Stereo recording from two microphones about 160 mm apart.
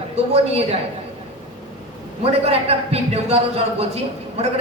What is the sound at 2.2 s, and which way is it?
A man's voice, 40° right (ahead or behind).